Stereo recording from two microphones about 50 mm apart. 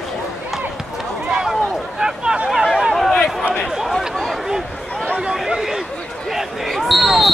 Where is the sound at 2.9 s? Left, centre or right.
Centre.